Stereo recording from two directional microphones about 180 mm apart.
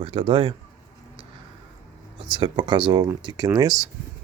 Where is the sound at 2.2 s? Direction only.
25° right (ahead or behind).